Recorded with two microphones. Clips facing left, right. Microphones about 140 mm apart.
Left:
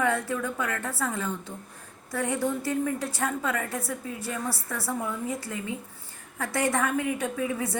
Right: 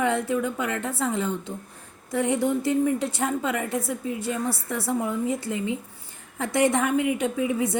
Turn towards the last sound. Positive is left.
turn(degrees=-20)  # may be behind; listen again after turning